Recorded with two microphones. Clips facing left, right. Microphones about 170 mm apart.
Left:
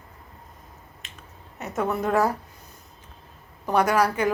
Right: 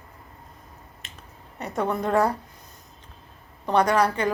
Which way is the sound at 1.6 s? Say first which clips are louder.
Even; 5° left (ahead or behind).